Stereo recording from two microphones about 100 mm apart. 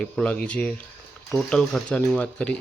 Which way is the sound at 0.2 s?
10° left (ahead or behind).